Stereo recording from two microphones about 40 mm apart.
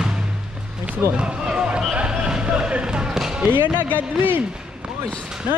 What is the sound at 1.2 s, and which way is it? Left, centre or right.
Run, right.